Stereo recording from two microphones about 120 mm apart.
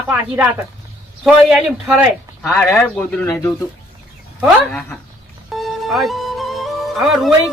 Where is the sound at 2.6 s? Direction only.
10° left (ahead or behind).